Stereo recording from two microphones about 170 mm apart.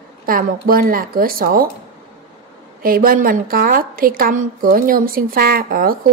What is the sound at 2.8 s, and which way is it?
A woman's voice, 60° right (ahead or behind).